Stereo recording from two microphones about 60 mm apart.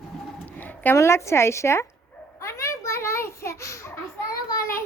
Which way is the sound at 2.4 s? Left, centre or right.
Left.